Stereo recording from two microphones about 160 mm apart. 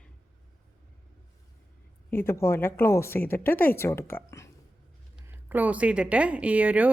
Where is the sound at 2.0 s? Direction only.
15° left (ahead or behind).